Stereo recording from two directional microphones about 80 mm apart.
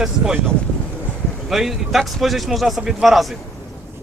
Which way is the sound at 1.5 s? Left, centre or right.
Centre.